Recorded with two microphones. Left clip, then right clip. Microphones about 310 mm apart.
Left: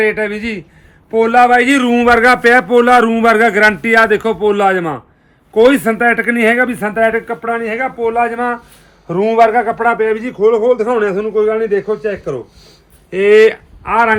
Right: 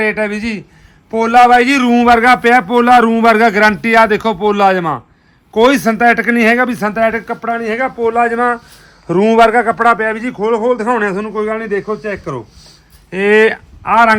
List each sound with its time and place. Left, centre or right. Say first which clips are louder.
0.0 s a man's voice: left 1 dB; right